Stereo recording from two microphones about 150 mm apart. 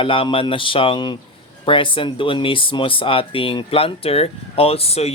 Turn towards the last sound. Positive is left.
turn(degrees=45)  # may be behind; listen again after turning